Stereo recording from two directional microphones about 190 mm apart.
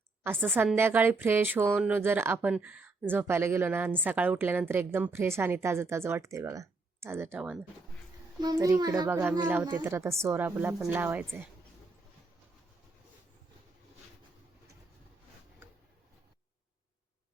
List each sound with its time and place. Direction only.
0.3 s a woman's voice: 5° right (ahead or behind)
8.4 s a woman's voice: 20° right (ahead or behind)